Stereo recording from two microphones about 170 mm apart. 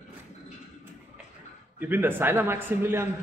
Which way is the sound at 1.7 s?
10° right (ahead or behind).